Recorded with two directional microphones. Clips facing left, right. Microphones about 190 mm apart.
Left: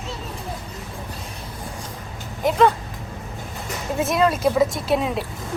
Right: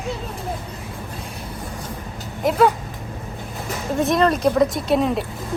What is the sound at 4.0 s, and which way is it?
Speech, 5° left (ahead or behind).